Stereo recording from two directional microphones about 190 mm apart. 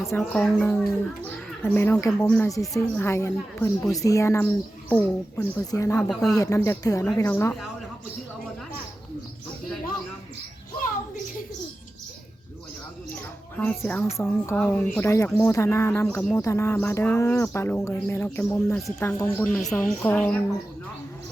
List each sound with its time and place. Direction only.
0.2 s speech: 5° left (ahead or behind)
13.1 s a child's voice: 10° left (ahead or behind)